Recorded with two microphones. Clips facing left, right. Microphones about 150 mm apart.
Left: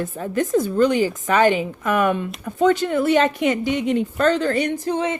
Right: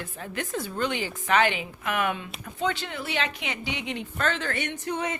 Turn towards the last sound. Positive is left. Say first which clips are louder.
# left 8 dB
turn(degrees=30)  # may be behind; listen again after turning